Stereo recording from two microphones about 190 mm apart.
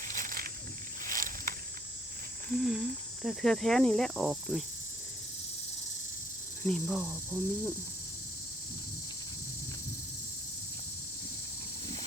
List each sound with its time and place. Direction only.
0.0 s a sound: 45° right (ahead or behind)
1.0 s vehicle: 45° right (ahead or behind)
2.6 s speech: centre (ahead or behind)
3.2 s cricket: centre (ahead or behind)
6.6 s speech: 5° left (ahead or behind)
6.8 s speech: 10° right (ahead or behind)